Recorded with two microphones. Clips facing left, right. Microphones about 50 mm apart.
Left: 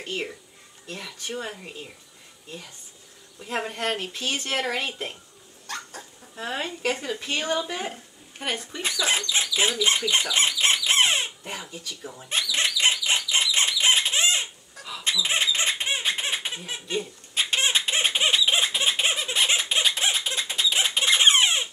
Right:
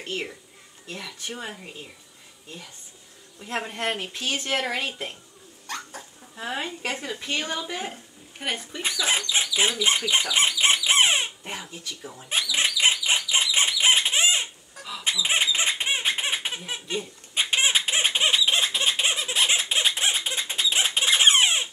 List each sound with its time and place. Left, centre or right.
0.0 s speech: centre
3.3 s speech: centre
3.6 s speech: centre
4.2 s speech: centre
12.0 s speech: centre
12.3 s a sound: centre
15.0 s baby laughter: centre
17.3 s a sound: centre
19.9 s squeak: centre